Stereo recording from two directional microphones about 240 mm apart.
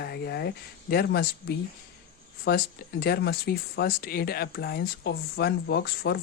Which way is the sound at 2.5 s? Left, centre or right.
Left.